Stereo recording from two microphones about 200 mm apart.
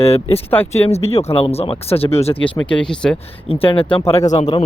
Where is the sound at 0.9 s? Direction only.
30° left (ahead or behind).